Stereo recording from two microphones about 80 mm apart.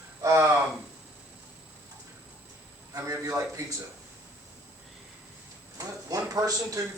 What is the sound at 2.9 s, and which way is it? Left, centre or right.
Speech, right.